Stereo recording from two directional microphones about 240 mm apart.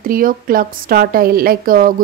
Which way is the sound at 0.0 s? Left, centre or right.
Right.